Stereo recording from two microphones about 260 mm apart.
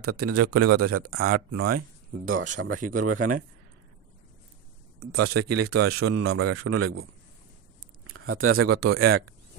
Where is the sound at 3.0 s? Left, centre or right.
Right.